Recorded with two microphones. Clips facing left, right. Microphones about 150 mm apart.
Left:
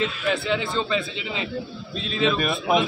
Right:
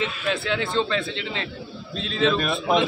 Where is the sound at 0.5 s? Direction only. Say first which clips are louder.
Even; 5° left (ahead or behind).